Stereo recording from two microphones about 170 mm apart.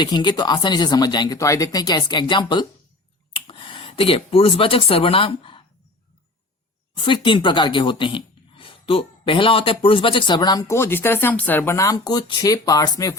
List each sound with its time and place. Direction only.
0.0 s speech: 25° left (ahead or behind)
6.9 s speech: 30° left (ahead or behind)